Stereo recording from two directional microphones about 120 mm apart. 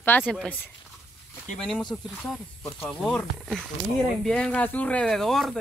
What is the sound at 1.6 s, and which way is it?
Speech, 5° left (ahead or behind).